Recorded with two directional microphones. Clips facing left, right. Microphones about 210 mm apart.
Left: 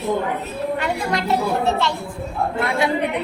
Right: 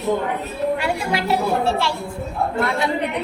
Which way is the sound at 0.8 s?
10° right (ahead or behind).